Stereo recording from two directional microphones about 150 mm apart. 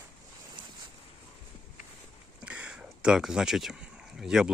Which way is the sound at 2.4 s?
10° right (ahead or behind).